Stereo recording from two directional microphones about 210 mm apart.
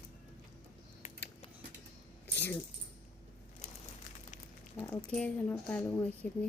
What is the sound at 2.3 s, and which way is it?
Speech, 10° left (ahead or behind).